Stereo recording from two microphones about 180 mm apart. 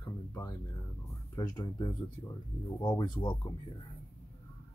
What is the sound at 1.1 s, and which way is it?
Speech, 25° left (ahead or behind).